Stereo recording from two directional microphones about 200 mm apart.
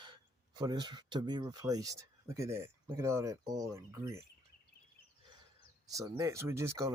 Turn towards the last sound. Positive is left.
turn(degrees=-15)  # may be behind; listen again after turning